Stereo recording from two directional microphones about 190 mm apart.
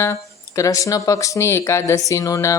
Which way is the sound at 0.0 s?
15° left (ahead or behind).